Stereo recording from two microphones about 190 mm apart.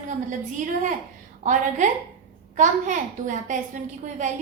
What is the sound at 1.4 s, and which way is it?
A woman's voice, 40° right (ahead or behind).